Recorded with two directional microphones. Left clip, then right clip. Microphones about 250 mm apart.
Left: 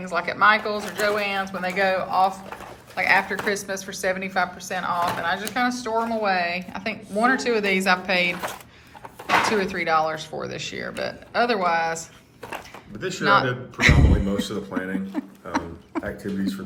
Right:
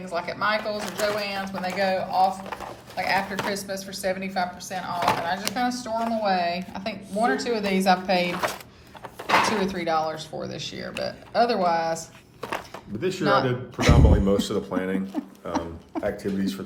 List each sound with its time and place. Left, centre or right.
0.0 s speech: centre
13.0 s speech: right
13.2 s speech: centre
14.8 s speech: right
15.4 s a sound: centre